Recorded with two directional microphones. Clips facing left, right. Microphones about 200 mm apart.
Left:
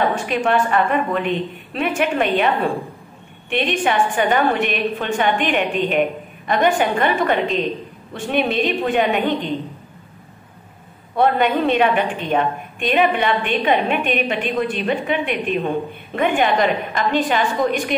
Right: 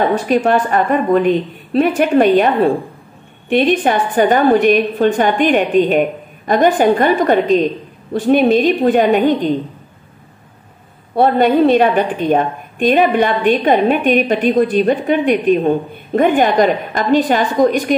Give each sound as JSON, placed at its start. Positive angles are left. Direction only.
{"t": 0.1, "sound": "a woman's voice", "side_deg": -35}
{"t": 11.1, "sound": "a woman's voice", "side_deg": -35}